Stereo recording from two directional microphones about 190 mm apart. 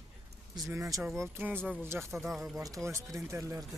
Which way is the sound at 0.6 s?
15° right (ahead or behind).